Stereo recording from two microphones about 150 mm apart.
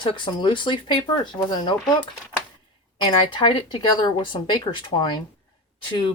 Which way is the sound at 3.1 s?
35° left (ahead or behind).